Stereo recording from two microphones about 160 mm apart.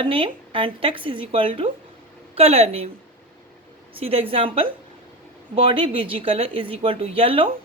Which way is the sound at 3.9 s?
35° right (ahead or behind).